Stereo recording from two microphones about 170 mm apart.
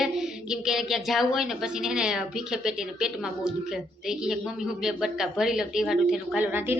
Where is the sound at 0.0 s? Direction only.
5° right (ahead or behind).